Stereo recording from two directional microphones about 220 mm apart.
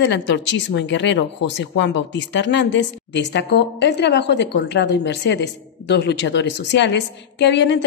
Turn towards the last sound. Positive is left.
turn(degrees=55)  # may be behind; listen again after turning